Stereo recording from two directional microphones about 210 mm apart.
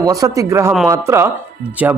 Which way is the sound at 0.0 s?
15° right (ahead or behind).